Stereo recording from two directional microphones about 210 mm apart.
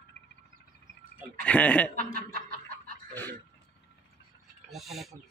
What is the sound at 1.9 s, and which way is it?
Chuckle, 45° right (ahead or behind).